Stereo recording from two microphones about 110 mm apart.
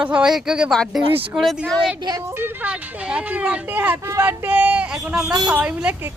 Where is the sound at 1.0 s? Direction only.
55° right (ahead or behind).